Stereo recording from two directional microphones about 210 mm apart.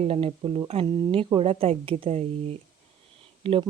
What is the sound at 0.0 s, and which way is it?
Speech, 30° right (ahead or behind).